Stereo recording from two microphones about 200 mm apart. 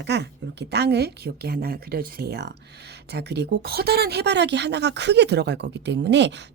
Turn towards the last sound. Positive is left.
turn(degrees=-60)  # may be behind; listen again after turning